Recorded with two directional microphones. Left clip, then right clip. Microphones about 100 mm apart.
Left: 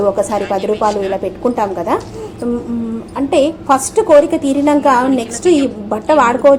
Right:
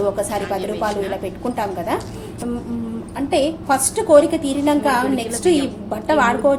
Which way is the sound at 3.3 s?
40° left (ahead or behind).